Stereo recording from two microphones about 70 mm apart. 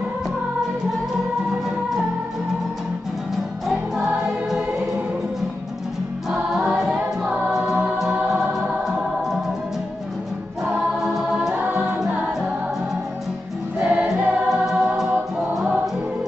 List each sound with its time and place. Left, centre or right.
4.5 s choir: centre
6.5 s music: centre
10.7 s music: centre
11.5 s music: right
13.7 s choir: right
14.5 s music: centre